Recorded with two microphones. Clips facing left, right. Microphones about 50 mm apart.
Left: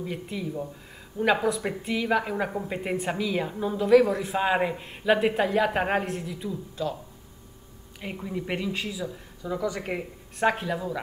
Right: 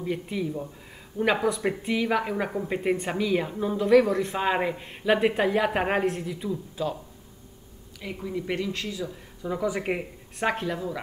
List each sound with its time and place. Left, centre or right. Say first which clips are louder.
0.0 s a woman's voice: right 3 dB; centre
8.0 s speech: right 1 dB; left
8.3 s speech: right 1 dB; centre
9.4 s speech: right 2 dB; centre
10.3 s a woman's voice: left 2 dB; centre